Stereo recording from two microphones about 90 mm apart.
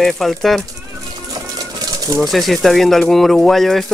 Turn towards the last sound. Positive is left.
turn(degrees=5)  # may be behind; listen again after turning